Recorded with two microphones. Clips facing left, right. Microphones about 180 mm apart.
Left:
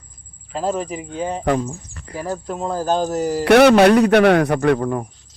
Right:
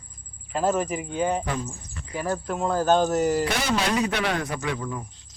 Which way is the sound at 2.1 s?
30° left (ahead or behind).